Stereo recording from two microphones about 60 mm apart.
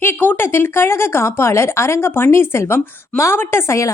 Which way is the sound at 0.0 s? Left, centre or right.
Left.